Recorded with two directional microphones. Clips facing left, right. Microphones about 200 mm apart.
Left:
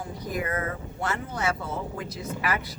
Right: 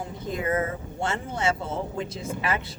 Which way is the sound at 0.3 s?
25° right (ahead or behind).